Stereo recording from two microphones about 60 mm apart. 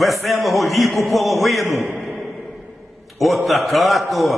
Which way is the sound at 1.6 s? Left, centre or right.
Left.